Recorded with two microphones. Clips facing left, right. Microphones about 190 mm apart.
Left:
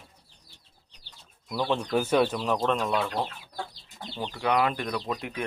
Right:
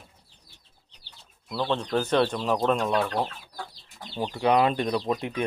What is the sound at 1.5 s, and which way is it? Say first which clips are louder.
Speech: even; 10° left (ahead or behind).